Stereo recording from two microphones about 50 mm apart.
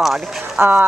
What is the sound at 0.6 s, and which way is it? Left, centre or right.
Speech, right.